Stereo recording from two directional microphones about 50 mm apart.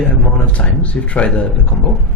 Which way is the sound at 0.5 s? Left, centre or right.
Left.